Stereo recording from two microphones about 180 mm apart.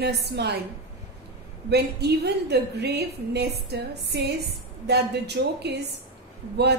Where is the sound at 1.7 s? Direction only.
65° right (ahead or behind).